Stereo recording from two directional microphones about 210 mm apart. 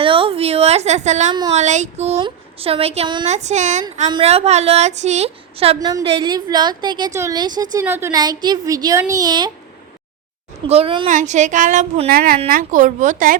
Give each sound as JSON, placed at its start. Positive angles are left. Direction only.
{"t": 0.0, "sound": "a sound", "side_deg": -25}
{"t": 1.3, "sound": "a woman's voice", "side_deg": -20}
{"t": 1.5, "sound": "a woman's voice", "side_deg": -35}
{"t": 10.7, "sound": "speech", "side_deg": -25}